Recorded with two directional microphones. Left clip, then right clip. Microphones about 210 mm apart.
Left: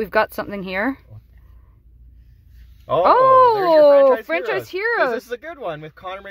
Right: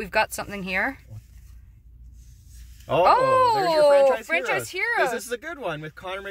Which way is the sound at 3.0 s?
45° left (ahead or behind).